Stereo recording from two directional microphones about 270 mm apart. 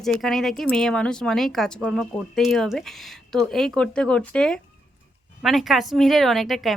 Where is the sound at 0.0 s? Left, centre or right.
Centre.